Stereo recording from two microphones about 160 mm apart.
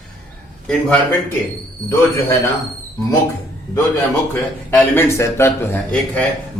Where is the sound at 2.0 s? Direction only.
20° left (ahead or behind).